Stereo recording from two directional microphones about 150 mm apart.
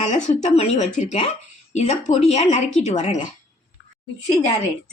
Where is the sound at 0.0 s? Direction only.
50° left (ahead or behind).